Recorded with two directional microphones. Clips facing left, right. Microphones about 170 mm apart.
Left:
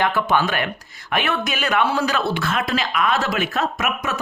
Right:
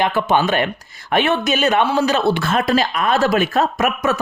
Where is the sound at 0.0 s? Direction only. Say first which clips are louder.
Right 3 dB; 20° right (ahead or behind).